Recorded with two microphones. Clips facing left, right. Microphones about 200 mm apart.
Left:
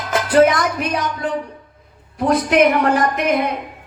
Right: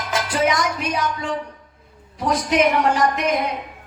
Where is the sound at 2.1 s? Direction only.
55° left (ahead or behind).